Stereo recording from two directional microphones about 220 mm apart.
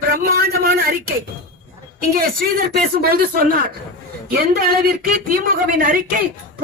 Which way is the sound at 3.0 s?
45° right (ahead or behind).